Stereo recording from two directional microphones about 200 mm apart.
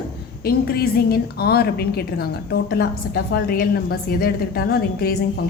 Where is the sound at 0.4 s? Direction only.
50° left (ahead or behind).